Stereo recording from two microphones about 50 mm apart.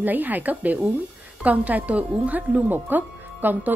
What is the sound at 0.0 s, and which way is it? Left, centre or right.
Speech, right.